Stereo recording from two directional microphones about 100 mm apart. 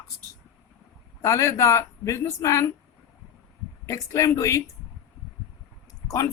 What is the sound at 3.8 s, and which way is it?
Speech, 30° left (ahead or behind).